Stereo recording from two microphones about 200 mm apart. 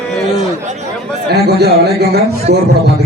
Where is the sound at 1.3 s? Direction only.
55° right (ahead or behind).